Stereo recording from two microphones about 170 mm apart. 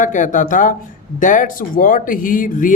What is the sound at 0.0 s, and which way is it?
Speech, 50° left (ahead or behind).